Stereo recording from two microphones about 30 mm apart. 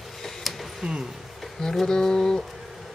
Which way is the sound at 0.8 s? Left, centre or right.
Right.